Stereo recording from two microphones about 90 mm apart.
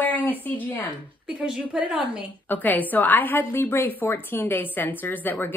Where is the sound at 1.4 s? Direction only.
10° right (ahead or behind).